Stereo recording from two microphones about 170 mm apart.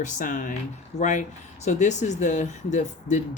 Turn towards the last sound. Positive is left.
turn(degrees=45)  # may be behind; listen again after turning